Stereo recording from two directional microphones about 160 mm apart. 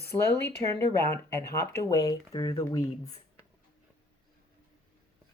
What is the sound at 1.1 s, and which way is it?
Speech, 15° left (ahead or behind).